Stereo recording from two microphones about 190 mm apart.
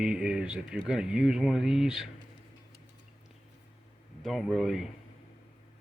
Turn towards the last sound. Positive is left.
turn(degrees=0)  # may be behind; listen again after turning